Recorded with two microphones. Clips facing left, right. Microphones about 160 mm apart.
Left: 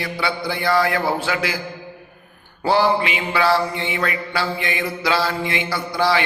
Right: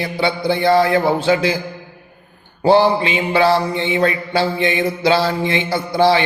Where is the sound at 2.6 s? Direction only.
25° right (ahead or behind).